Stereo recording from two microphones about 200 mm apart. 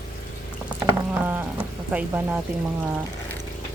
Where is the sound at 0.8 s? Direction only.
10° right (ahead or behind).